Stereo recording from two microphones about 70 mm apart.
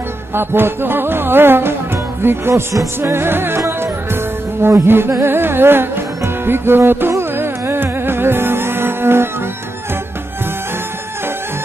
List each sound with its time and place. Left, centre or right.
0.3 s music: right